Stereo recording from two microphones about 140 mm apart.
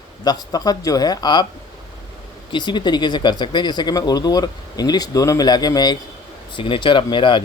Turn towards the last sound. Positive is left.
turn(degrees=35)  # may be behind; listen again after turning